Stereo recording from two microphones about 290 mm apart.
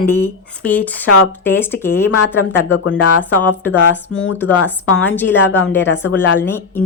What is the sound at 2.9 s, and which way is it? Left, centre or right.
Speech, left.